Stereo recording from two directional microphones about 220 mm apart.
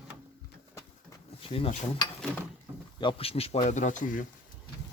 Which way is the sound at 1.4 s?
25° left (ahead or behind).